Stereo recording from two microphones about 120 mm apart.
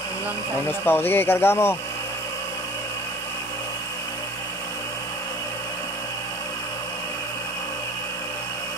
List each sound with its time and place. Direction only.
0.7 s speech: 15° left (ahead or behind)